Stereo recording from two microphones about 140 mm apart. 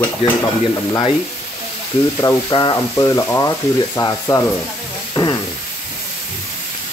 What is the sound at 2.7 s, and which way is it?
Frying, 25° left (ahead or behind).